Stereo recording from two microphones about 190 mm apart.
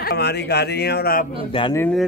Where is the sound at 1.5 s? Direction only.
25° left (ahead or behind).